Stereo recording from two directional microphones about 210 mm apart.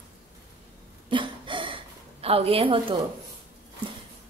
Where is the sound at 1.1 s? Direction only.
25° right (ahead or behind).